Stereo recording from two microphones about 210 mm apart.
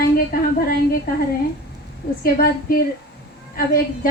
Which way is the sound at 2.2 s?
45° left (ahead or behind).